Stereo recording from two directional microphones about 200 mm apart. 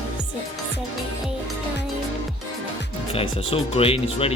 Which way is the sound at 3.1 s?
30° left (ahead or behind).